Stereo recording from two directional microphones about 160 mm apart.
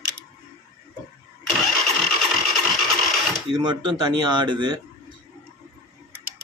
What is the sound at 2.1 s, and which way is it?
Engine, centre (ahead or behind).